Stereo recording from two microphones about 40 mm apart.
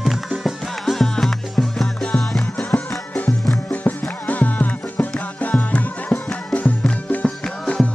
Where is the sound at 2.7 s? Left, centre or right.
Left.